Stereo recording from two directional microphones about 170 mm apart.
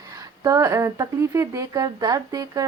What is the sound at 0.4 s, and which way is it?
Speech, 20° right (ahead or behind).